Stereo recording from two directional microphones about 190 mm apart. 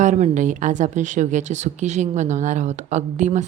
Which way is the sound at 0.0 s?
40° right (ahead or behind).